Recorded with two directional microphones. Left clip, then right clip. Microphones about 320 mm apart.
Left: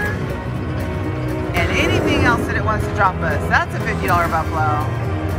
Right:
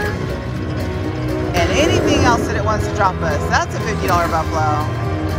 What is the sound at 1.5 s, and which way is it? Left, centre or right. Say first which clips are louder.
Speech: right 3 dB; centre.